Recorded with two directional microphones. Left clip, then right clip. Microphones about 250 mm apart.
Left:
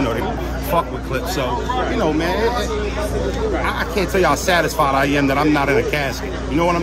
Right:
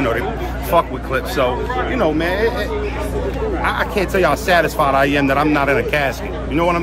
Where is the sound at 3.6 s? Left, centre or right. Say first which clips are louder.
Right 2 dB; centre.